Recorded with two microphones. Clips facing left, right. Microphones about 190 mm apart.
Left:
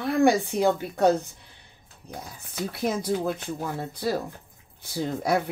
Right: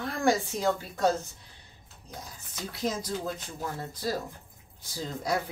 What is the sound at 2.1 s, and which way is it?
Speech, 60° left (ahead or behind).